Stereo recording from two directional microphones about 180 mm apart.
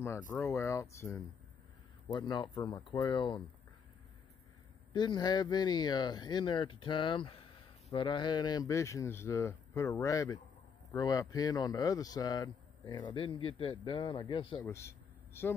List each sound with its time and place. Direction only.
0.5 s speech: 15° left (ahead or behind)
4.9 s speech: 25° left (ahead or behind)
14.7 s a sound: 15° left (ahead or behind)